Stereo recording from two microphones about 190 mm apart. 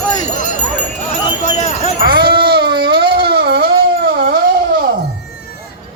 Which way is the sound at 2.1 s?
25° right (ahead or behind).